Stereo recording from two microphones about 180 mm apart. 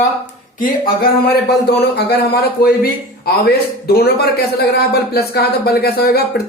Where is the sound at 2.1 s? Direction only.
60° left (ahead or behind).